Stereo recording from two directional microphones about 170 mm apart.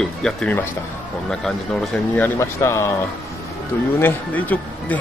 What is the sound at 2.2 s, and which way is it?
Speech, 15° left (ahead or behind).